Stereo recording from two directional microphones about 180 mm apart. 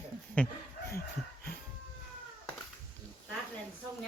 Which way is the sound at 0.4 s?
10° left (ahead or behind).